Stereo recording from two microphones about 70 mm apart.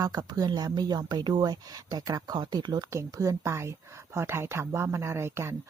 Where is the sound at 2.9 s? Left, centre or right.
Right.